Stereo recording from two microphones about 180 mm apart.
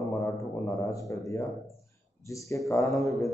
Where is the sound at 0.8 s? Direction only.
15° left (ahead or behind).